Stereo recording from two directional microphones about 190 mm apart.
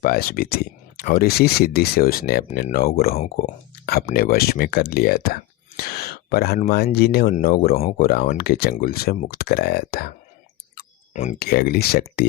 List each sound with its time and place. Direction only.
0.0 s speech: 55° left (ahead or behind)
11.1 s speech: 40° left (ahead or behind)
11.3 s speech: 55° left (ahead or behind)